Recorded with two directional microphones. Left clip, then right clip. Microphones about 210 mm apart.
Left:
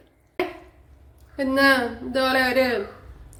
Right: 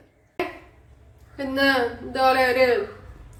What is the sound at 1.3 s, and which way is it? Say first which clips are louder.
A woman's voice: left 2 dB; 45° left (ahead or behind).